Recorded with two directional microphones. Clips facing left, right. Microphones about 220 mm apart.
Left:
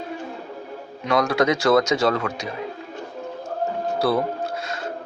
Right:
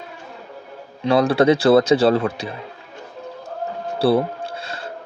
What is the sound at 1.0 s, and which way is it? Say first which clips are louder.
A man's voice: right 5 dB; 30° right (ahead or behind).